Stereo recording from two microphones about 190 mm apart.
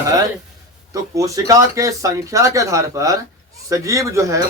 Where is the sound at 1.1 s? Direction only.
15° right (ahead or behind).